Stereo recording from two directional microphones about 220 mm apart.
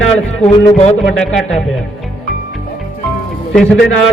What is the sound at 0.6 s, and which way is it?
Speech, 30° left (ahead or behind).